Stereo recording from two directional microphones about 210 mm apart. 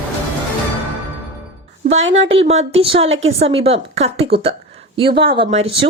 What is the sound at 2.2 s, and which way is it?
Speech, 30° right (ahead or behind).